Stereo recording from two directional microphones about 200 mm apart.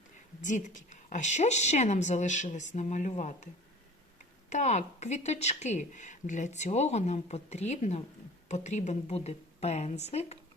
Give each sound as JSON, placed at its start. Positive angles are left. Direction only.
{"t": 0.4, "sound": "speech", "side_deg": 40}